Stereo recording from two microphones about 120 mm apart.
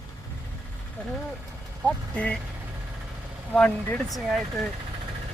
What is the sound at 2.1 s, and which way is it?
Speech, 10° left (ahead or behind).